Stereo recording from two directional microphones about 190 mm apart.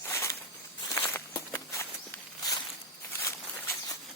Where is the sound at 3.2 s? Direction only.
10° left (ahead or behind).